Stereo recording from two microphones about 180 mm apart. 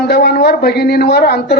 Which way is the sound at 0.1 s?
60° left (ahead or behind).